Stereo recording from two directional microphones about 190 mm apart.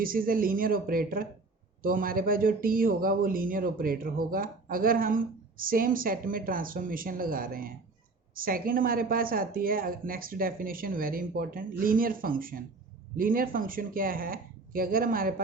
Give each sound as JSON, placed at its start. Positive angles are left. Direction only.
{"t": 0.0, "sound": "speech", "side_deg": -50}